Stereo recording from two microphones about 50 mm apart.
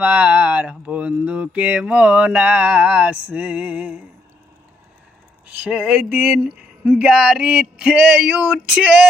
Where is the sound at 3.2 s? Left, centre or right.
Right.